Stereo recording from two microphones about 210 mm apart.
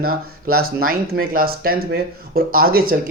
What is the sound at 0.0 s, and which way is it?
Speech, 45° right (ahead or behind).